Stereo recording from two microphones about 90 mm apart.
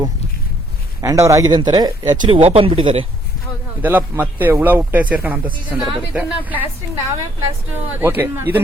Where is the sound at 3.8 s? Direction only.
20° right (ahead or behind).